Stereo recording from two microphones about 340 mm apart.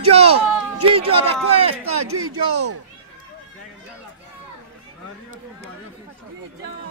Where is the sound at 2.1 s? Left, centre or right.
Right.